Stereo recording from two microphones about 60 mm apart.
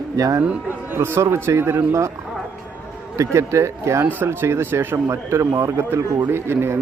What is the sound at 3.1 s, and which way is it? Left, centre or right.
A man's voice, right.